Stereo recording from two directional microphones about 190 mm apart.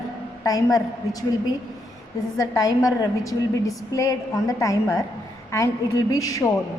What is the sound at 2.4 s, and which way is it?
A woman's voice, 20° left (ahead or behind).